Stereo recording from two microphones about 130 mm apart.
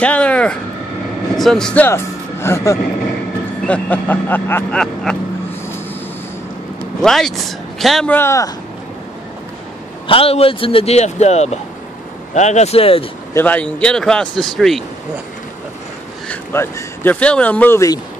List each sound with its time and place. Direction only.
0.0 s speech: 10° left (ahead or behind)
2.4 s speech: 20° left (ahead or behind)
3.6 s speech: 10° left (ahead or behind)
7.0 s speech: 5° left (ahead or behind)
8.1 s speech: 20° left (ahead or behind)
10.0 s speech: 45° left (ahead or behind)
13.3 s speech: 15° left (ahead or behind)
16.3 s speech: 15° left (ahead or behind)